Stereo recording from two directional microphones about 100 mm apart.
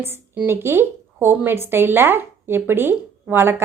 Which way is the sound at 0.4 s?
25° right (ahead or behind).